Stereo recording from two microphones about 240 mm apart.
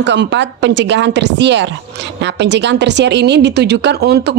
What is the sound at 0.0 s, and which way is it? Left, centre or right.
Speech, right.